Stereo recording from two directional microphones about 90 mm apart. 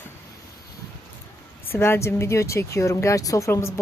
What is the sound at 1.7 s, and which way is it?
Speech, 25° left (ahead or behind).